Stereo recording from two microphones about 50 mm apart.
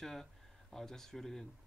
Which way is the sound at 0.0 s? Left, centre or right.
Centre.